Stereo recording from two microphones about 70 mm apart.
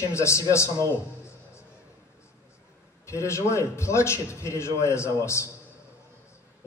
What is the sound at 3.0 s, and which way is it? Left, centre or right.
A man's voice, left.